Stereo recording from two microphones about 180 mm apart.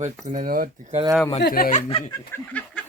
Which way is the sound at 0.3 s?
50° right (ahead or behind).